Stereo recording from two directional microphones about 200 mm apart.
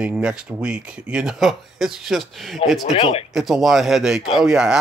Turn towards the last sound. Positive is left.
turn(degrees=-5)  # may be behind; listen again after turning